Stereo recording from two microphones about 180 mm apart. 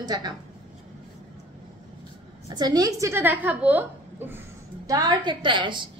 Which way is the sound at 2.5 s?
20° right (ahead or behind).